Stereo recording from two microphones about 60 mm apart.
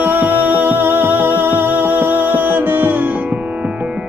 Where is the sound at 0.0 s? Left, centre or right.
Right.